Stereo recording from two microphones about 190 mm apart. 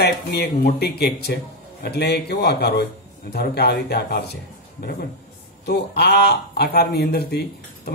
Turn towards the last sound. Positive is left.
turn(degrees=55)  # may be behind; listen again after turning